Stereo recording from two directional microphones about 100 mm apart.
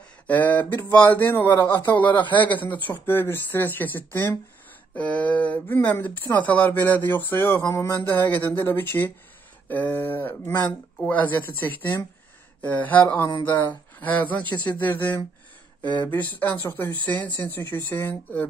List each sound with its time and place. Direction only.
0.3 s speech: 15° left (ahead or behind)
2.0 s speech: 55° left (ahead or behind)
3.1 s speech: 20° left (ahead or behind)
13.3 s speech: 50° left (ahead or behind)
13.6 s speech: 20° left (ahead or behind)